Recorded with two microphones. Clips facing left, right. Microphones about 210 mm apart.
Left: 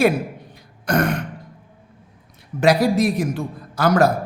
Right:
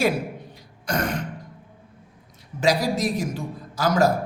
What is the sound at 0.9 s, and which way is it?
Throat clearing, 60° left (ahead or behind).